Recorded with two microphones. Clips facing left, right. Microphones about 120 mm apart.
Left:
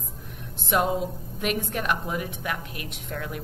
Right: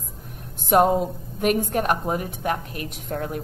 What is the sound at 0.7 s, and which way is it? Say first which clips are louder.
A woman's voice: right 6 dB; 45° right (ahead or behind).